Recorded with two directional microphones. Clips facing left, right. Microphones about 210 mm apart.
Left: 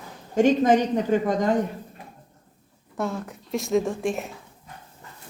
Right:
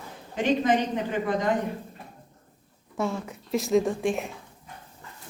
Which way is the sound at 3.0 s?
Centre (ahead or behind).